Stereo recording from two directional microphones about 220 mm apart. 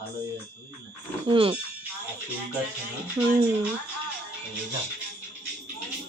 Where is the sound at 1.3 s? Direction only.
25° right (ahead or behind).